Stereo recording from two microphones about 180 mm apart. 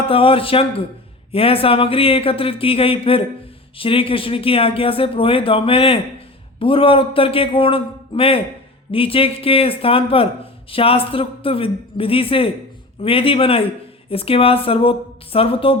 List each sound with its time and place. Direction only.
0.1 s speech: 30° left (ahead or behind)